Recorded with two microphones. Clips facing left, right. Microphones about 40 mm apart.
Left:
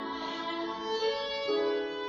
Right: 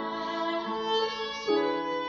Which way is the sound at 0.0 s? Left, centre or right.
Right.